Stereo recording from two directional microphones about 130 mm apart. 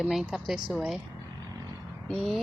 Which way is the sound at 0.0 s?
Centre (ahead or behind).